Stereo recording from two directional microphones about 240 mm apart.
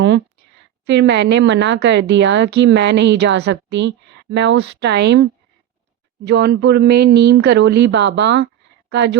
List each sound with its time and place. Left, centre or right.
0.9 s speech: right